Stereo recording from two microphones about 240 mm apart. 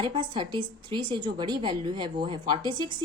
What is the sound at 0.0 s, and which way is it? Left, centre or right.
A woman's voice, centre.